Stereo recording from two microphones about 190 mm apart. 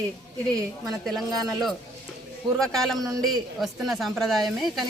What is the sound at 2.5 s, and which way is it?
Speech, centre (ahead or behind).